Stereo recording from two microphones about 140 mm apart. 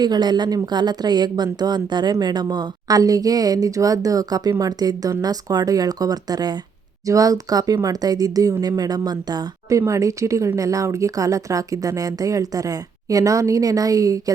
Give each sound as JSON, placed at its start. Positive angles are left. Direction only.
{"t": 0.0, "sound": "speech", "side_deg": -30}